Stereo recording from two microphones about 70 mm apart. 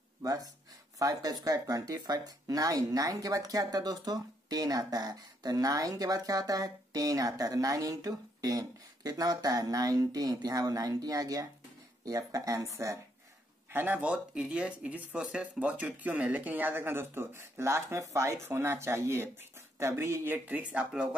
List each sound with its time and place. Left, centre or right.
0.2 s speech: right
13.7 s speech: right
20.3 s speech: right